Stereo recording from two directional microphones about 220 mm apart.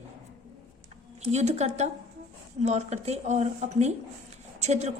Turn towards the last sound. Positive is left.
turn(degrees=-30)  # may be behind; listen again after turning